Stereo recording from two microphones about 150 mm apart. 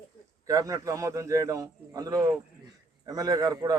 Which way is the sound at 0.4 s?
20° right (ahead or behind).